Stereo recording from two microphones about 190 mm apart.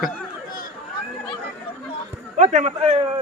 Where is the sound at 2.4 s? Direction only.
40° right (ahead or behind).